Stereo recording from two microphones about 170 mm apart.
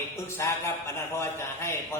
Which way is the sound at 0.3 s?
15° left (ahead or behind).